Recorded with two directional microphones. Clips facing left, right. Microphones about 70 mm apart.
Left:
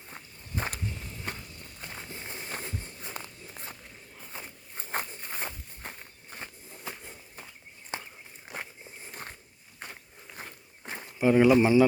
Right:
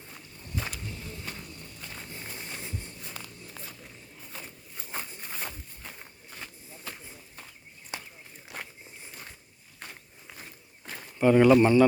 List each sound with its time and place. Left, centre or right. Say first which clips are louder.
0.1 s walk: even; left
1.8 s a sound: left 2 dB; left
2.5 s a sound: left 3 dB; left
3.0 s walk: left 2 dB; left
4.3 s walk: left 1 dB; left
4.7 s a sound: left 5 dB; left
6.3 s walk: left 2 dB; left
7.9 s walk: left 2 dB; left
8.5 s walk: left 1 dB; left
9.8 s biting: left 1 dB; left
10.4 s walk: left 5 dB; left
10.8 s a sound: left 2 dB; left
11.2 s speech: right 2 dB; centre